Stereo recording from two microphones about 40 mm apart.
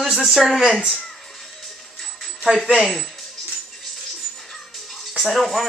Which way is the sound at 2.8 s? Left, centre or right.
Centre.